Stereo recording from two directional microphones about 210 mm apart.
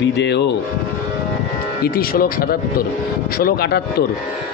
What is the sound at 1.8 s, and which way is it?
Mantra, 45° left (ahead or behind).